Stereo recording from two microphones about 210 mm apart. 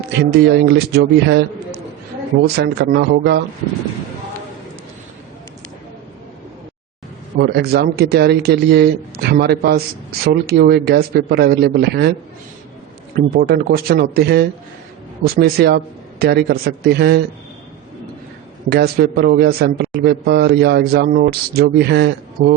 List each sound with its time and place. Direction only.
0.2 s a man's voice: 50° right (ahead or behind)
2.6 s a man's voice: 50° right (ahead or behind)
7.3 s a man's voice: 50° right (ahead or behind)
13.1 s a man's voice: 45° right (ahead or behind)
18.7 s a man's voice: 50° right (ahead or behind)